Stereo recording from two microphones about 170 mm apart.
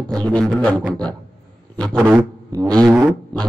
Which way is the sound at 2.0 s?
15° right (ahead or behind).